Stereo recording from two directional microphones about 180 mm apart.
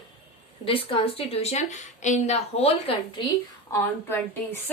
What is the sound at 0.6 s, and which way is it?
A woman's voice, 30° left (ahead or behind).